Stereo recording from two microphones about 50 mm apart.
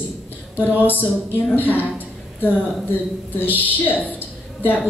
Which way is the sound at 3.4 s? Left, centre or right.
Left.